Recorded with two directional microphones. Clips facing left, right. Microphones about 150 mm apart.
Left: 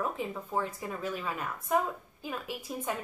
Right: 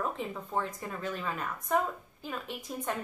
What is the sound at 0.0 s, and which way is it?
A woman's voice, 5° left (ahead or behind).